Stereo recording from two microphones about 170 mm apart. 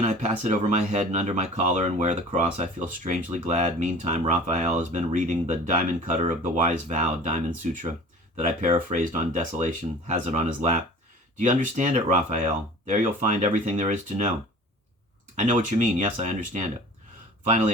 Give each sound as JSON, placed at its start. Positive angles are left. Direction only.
{"t": 0.0, "sound": "speech", "side_deg": -45}
{"t": 15.4, "sound": "speech", "side_deg": -45}